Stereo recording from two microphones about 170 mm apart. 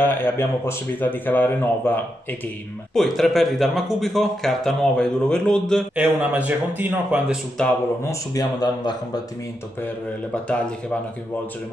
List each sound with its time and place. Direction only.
0.0 s speech: 15° left (ahead or behind)
5.9 s a man's voice: 10° right (ahead or behind)
8.0 s speech: 20° left (ahead or behind)
10.3 s speech: 5° left (ahead or behind)